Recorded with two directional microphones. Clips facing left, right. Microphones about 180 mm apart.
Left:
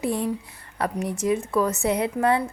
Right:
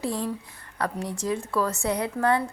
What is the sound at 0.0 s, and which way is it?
A woman's voice, 20° left (ahead or behind).